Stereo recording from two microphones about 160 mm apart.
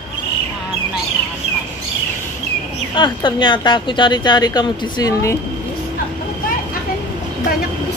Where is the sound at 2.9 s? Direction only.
30° left (ahead or behind).